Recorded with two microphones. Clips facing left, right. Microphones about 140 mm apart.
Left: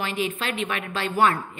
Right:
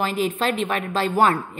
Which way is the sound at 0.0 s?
40° right (ahead or behind).